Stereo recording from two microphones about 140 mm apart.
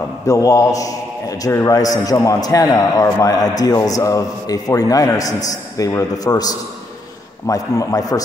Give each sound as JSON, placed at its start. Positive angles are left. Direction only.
{"t": 0.3, "sound": "a man's voice", "side_deg": 25}